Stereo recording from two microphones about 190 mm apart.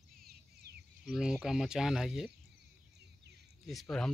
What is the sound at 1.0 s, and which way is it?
Speech, centre (ahead or behind).